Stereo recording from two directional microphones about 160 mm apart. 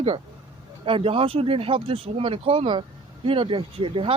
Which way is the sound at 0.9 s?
35° right (ahead or behind).